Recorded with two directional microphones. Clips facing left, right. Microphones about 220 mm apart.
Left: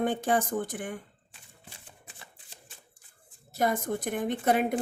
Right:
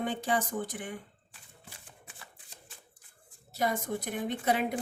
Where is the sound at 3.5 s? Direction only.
50° left (ahead or behind).